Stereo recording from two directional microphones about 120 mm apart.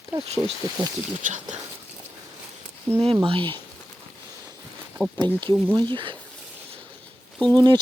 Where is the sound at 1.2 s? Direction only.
90° right.